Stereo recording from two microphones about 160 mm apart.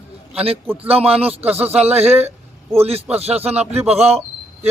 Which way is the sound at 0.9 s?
40° right (ahead or behind).